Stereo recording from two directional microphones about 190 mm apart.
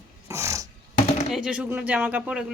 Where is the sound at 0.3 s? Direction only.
15° right (ahead or behind).